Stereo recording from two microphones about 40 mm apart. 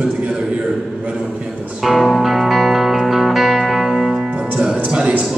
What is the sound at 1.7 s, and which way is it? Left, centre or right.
Music, centre.